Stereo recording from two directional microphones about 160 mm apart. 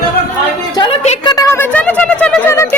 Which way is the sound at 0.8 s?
30° left (ahead or behind).